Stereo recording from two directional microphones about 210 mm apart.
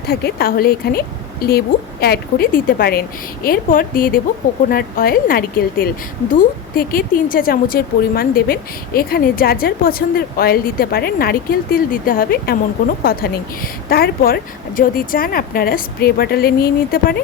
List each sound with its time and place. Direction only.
0.1 s a woman's voice: 50° left (ahead or behind)